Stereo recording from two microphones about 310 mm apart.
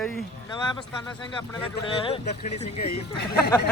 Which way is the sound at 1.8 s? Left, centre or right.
Centre.